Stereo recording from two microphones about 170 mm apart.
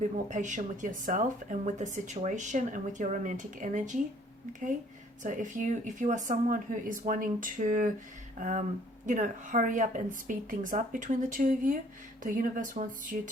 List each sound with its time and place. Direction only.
0.3 s speech: 45° right (ahead or behind)
5.2 s speech: 50° right (ahead or behind)